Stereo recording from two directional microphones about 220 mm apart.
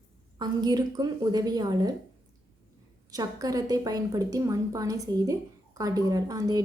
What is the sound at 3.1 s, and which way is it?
A woman's voice, 15° right (ahead or behind).